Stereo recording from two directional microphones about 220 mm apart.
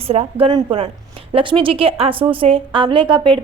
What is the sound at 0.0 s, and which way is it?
A woman's voice, 25° right (ahead or behind).